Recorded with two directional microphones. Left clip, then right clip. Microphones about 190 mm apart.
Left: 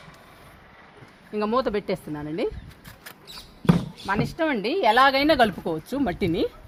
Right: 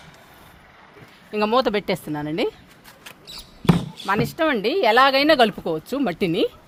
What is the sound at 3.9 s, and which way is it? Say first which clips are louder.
Speech: right 4 dB; 50° right (ahead or behind).